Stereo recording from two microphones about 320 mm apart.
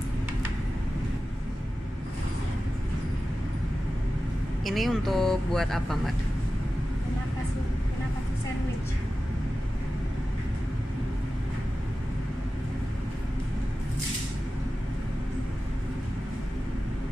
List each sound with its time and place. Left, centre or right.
4.6 s speech: centre